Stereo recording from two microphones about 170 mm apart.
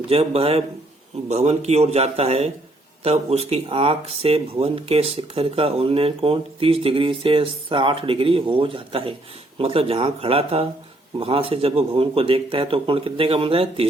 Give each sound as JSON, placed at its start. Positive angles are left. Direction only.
{"t": 0.1, "sound": "speech", "side_deg": -35}